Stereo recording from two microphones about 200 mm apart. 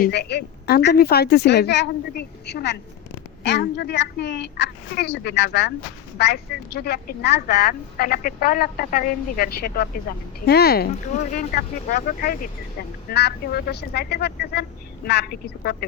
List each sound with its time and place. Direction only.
0.0 s a woman's voice: 55° left (ahead or behind)
11.1 s a woman's voice: 35° left (ahead or behind); by 15.7 s 55° left (ahead or behind)